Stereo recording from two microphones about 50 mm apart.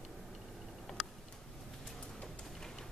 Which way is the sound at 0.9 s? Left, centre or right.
Centre.